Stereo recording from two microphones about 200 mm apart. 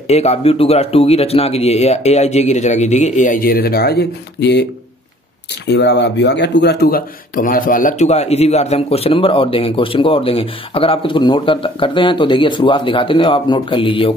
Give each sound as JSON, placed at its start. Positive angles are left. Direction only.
{"t": 0.1, "sound": "speech", "side_deg": 30}
{"t": 5.7, "sound": "speech", "side_deg": 60}